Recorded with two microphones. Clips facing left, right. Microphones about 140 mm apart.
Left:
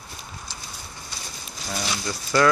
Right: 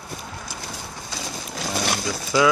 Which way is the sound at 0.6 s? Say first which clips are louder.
Right 6 dB; 85° right.